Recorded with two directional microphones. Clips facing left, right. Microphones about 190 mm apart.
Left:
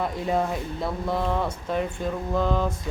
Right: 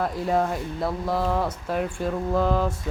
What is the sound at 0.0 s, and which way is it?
Speech, centre (ahead or behind).